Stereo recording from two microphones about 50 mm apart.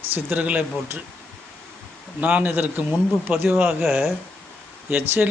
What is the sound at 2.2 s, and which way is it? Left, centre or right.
Speech, right.